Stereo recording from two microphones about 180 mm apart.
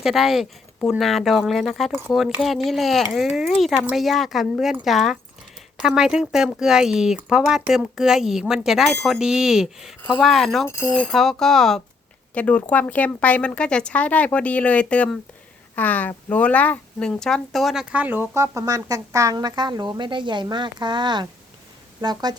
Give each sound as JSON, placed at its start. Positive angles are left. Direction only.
{"t": 0.0, "sound": "speech", "side_deg": 0}
{"t": 10.7, "sound": "a woman's voice", "side_deg": 15}